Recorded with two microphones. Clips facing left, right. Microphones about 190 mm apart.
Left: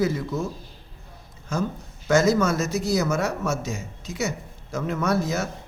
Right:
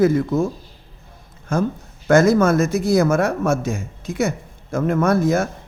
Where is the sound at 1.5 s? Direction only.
55° right (ahead or behind).